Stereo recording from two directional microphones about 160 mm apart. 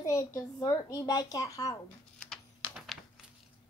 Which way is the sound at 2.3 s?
Centre (ahead or behind).